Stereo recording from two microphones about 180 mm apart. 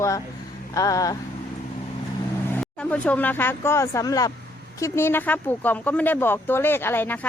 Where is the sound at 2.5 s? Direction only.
5° left (ahead or behind).